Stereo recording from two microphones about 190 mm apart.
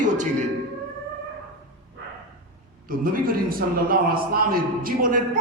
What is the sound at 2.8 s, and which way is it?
A man's voice, 50° right (ahead or behind).